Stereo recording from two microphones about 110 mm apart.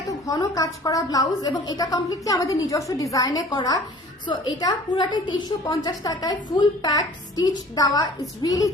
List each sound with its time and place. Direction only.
0.1 s a woman's voice: 35° left (ahead or behind)